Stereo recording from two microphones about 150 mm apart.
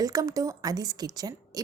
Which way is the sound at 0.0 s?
25° right (ahead or behind).